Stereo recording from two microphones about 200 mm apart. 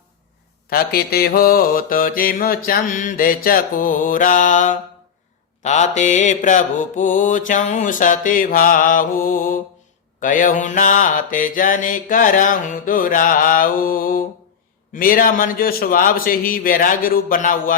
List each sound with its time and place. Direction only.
0.7 s mantra: 50° left (ahead or behind)